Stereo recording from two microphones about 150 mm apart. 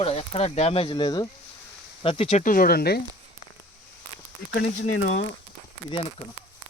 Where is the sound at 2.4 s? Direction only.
70° left (ahead or behind); by 3.0 s 90° left.